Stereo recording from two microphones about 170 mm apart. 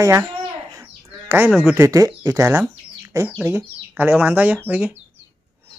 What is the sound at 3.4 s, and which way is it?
Speech, 15° right (ahead or behind).